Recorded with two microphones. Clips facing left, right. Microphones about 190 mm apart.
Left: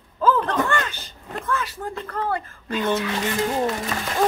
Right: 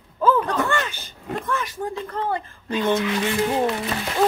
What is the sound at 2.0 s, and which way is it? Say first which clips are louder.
Speech: even; 20° right (ahead or behind).